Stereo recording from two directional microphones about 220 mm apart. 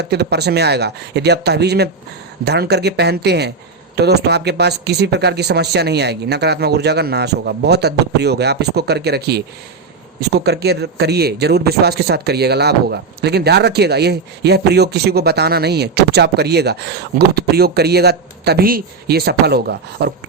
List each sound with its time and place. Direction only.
0.0 s a man's voice: 50° right (ahead or behind)